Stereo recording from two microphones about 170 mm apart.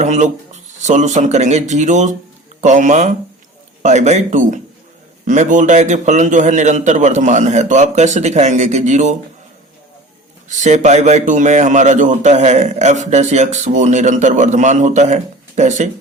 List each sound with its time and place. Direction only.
0.0 s a man's voice: 45° right (ahead or behind)
10.6 s a man's voice: 45° right (ahead or behind)